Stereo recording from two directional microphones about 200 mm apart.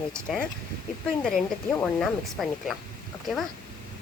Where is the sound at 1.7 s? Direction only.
Centre (ahead or behind).